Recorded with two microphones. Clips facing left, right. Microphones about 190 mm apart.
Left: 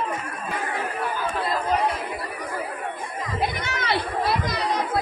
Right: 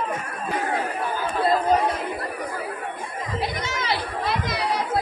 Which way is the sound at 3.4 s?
60° left (ahead or behind).